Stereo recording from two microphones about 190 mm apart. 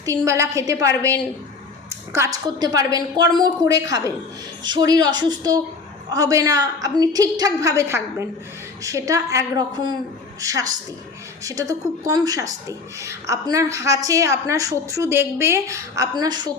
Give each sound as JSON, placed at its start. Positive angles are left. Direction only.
{"t": 0.0, "sound": "a woman's voice", "side_deg": -15}